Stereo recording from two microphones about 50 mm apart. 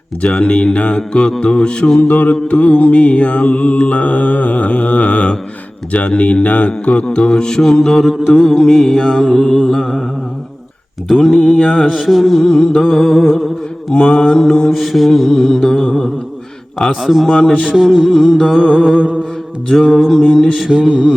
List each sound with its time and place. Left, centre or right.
0.2 s mantra: left
2.0 s mantra: left; by 10.0 s centre
11.1 s mantra: centre
11.6 s mantra: centre
11.9 s mantra: centre
12.8 s mantra: centre
13.9 s mantra: left
14.7 s mantra: centre
17.5 s mantra: left
17.7 s music: centre
18.9 s music: right
19.8 s music: centre
20.3 s mantra: centre
20.7 s music: centre